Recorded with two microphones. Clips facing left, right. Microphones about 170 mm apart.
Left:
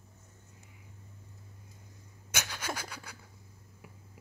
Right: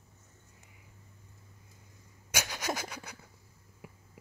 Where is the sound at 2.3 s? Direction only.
10° right (ahead or behind).